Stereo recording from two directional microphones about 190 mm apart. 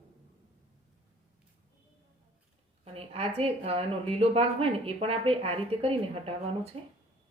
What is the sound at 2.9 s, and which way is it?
A woman's voice, 30° right (ahead or behind).